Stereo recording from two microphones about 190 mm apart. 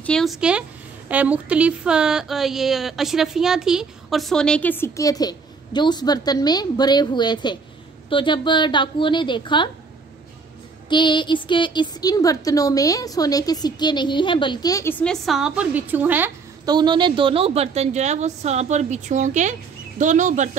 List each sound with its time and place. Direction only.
0.0 s a woman's voice: centre (ahead or behind); by 9.7 s 25° left (ahead or behind)
10.9 s a woman's voice: 25° left (ahead or behind); by 16.3 s 10° right (ahead or behind)
16.6 s a woman's voice: 25° right (ahead or behind); by 20.4 s 40° right (ahead or behind)